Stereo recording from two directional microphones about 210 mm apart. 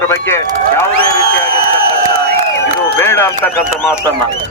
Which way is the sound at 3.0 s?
10° left (ahead or behind).